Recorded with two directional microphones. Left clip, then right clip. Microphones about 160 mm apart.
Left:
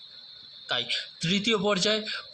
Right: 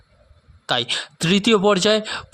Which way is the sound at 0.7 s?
90° right.